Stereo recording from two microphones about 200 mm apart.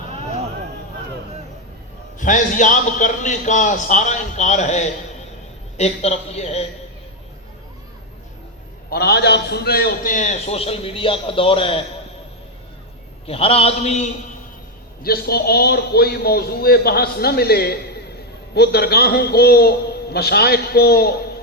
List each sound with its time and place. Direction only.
2.1 s a man's voice: 40° left (ahead or behind)
8.9 s a man's voice: 55° left (ahead or behind); by 11.8 s 25° left (ahead or behind)
13.2 s a man's voice: 30° left (ahead or behind)
15.0 s a man's voice: 50° left (ahead or behind)